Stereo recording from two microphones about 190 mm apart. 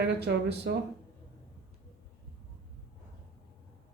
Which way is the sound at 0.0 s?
60° right (ahead or behind).